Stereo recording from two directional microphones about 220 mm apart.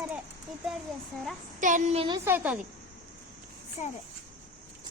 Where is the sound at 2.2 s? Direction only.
10° right (ahead or behind).